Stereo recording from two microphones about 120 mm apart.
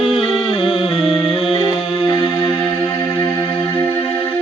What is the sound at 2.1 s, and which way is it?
Music, 40° left (ahead or behind).